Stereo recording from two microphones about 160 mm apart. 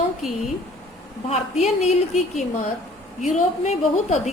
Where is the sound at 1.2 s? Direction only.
40° left (ahead or behind).